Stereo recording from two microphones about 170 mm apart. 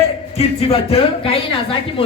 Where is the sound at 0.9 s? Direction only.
35° left (ahead or behind).